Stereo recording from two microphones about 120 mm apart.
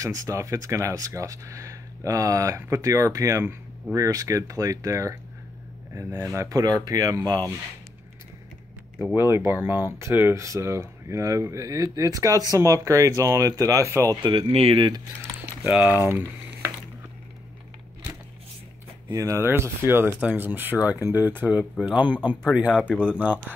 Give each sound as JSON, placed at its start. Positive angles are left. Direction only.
{"t": 0.0, "sound": "speech", "side_deg": -25}
{"t": 9.1, "sound": "speech", "side_deg": -20}
{"t": 14.5, "sound": "speech", "side_deg": -50}
{"t": 15.6, "sound": "speech", "side_deg": -15}
{"t": 19.1, "sound": "speech", "side_deg": -25}